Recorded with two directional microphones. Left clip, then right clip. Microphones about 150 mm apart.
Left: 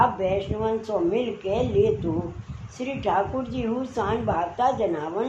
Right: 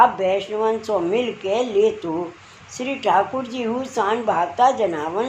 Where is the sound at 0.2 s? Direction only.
50° right (ahead or behind).